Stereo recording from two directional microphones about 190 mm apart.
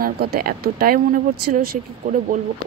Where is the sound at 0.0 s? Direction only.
50° right (ahead or behind).